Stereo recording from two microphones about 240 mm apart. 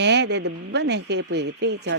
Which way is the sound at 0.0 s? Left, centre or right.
Right.